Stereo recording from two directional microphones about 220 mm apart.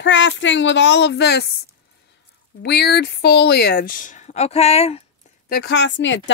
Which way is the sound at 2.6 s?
50° left (ahead or behind).